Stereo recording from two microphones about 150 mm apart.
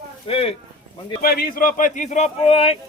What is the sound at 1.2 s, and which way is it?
Speech, 85° left.